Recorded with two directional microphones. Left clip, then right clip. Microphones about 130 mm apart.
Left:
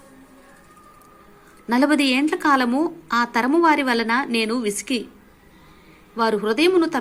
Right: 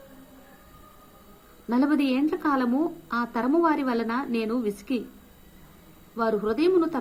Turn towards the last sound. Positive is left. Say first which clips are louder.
# left 5 dB
turn(degrees=20)  # may be behind; listen again after turning